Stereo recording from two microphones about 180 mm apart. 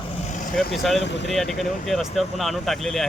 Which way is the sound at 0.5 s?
Centre (ahead or behind).